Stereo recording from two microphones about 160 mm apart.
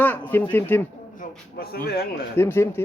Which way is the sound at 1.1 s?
75° left (ahead or behind).